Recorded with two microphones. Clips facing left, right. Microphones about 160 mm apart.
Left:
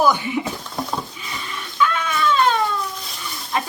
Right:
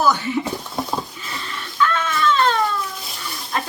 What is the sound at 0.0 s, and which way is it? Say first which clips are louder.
Speech: left 1 dB; 15° left (ahead or behind).